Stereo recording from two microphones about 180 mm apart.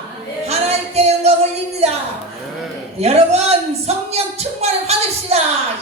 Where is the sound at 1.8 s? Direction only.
35° right (ahead or behind).